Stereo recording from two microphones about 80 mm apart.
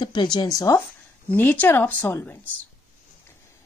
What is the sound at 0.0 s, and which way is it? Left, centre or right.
Speech, left.